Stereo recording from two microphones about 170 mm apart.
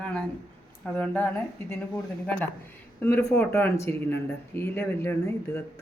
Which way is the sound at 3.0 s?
15° left (ahead or behind).